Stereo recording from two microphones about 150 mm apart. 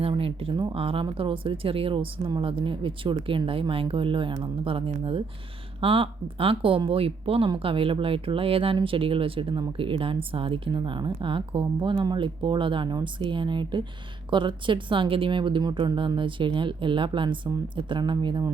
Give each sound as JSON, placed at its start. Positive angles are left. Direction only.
{"t": 0.0, "sound": "speech", "side_deg": -40}